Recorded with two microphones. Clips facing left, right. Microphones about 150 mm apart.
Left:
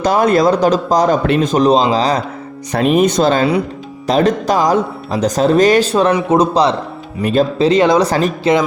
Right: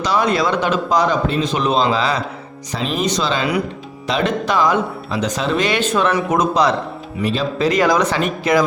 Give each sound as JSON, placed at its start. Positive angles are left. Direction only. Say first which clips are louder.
{"t": 0.0, "sound": "speech", "louder": "left 6 dB", "side_deg": 50}
{"t": 2.7, "sound": "speech", "louder": "left 8 dB", "side_deg": 55}
{"t": 7.2, "sound": "speech", "louder": "left 7 dB", "side_deg": 50}
{"t": 7.6, "sound": "speech", "louder": "left 3 dB", "side_deg": 30}